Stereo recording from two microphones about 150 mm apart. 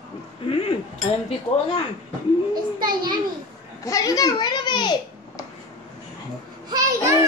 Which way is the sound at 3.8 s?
25° left (ahead or behind).